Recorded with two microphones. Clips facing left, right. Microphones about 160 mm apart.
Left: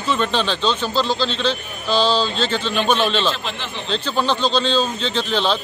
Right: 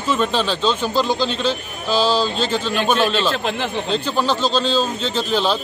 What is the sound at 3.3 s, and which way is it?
Speech, 50° right (ahead or behind).